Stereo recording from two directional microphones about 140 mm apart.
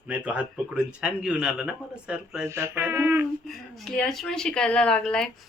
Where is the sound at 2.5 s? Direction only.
15° right (ahead or behind).